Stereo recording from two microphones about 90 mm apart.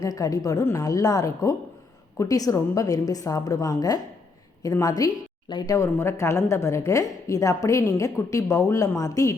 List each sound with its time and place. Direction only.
0.0 s a woman's voice: 40° left (ahead or behind)
5.5 s speech: 55° left (ahead or behind)
5.7 s a woman's voice: 30° left (ahead or behind)